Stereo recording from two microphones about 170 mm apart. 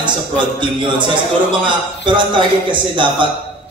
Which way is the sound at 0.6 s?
30° right (ahead or behind).